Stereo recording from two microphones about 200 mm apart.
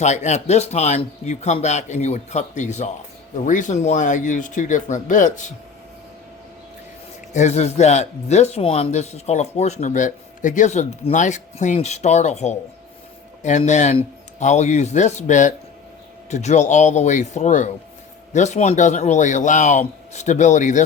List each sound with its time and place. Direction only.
0.0 s speech: 35° left (ahead or behind)
7.3 s speech: 35° left (ahead or behind)